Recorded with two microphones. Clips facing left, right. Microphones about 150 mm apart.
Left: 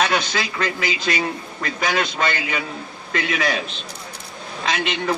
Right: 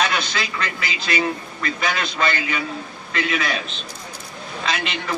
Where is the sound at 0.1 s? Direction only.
45° left (ahead or behind).